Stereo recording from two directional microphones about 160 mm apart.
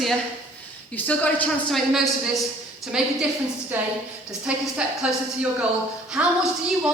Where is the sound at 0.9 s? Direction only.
10° left (ahead or behind).